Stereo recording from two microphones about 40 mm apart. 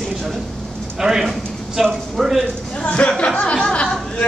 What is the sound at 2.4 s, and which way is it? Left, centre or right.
Speech, left.